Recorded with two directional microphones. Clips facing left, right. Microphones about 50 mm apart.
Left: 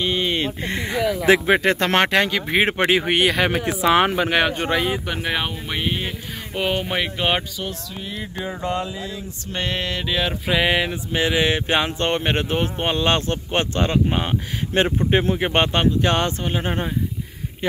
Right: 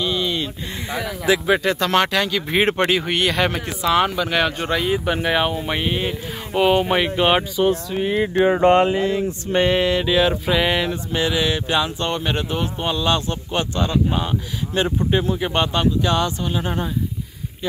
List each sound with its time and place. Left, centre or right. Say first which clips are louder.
0.0 s a sound: left 1 dB; left
1.2 s speech: left 1 dB; left
2.3 s speech: right 1 dB; centre; by 4.3 s left
4.3 s speech: left 1 dB; centre
4.9 s speech: right 5 dB; centre
7.9 s speech: right 11 dB; right
8.5 s a sound: right 10 dB; right
9.5 s a sound: right 8 dB; centre
10.5 s speech: even; centre
11.1 s speech: left 2 dB; left